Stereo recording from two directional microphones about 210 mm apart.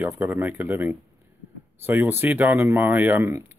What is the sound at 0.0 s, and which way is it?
A man's voice, 10° right (ahead or behind).